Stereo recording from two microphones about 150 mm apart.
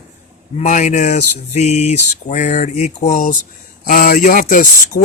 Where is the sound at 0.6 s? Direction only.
55° left (ahead or behind).